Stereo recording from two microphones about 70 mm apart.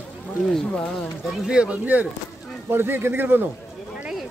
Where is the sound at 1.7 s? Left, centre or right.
Right.